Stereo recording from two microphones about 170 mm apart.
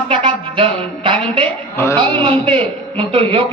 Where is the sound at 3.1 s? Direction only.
30° right (ahead or behind).